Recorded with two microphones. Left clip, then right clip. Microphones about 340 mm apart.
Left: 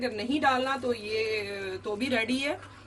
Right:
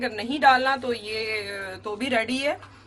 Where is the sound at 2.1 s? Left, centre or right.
Centre.